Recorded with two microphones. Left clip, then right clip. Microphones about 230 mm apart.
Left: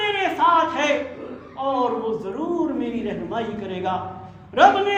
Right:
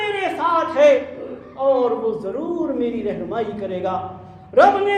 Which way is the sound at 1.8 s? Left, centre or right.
Centre.